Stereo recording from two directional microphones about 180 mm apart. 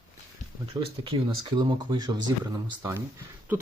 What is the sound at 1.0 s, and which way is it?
Speech, 25° right (ahead or behind).